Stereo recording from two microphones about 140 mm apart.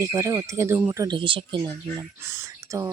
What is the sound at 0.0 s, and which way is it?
A woman's voice, 25° right (ahead or behind).